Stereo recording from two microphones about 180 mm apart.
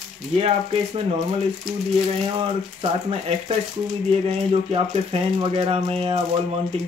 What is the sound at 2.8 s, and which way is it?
Speech, 30° right (ahead or behind).